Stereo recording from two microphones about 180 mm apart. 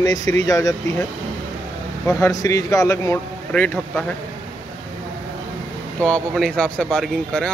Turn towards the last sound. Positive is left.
turn(degrees=5)  # may be behind; listen again after turning